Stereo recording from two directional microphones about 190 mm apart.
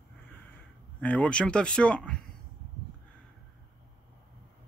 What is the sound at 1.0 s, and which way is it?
Speech, 5° left (ahead or behind).